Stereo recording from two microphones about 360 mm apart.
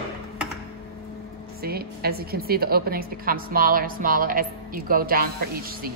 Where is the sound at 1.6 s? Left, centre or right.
Right.